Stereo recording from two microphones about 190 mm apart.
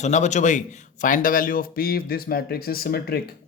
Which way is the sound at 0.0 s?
40° left (ahead or behind).